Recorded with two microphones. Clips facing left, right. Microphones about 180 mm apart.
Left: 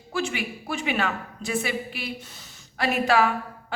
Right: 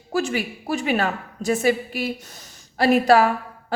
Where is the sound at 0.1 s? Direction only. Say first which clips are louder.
Right 5 dB; 40° right (ahead or behind).